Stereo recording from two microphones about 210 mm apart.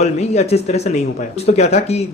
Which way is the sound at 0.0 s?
30° left (ahead or behind).